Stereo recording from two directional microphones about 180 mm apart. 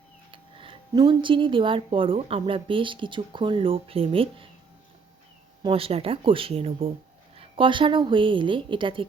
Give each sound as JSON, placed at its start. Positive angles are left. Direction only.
{"t": 0.3, "sound": "speech", "side_deg": -30}
{"t": 5.6, "sound": "speech", "side_deg": -30}